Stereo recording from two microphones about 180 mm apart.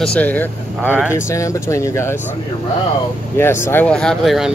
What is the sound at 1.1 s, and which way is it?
Speech, 15° left (ahead or behind).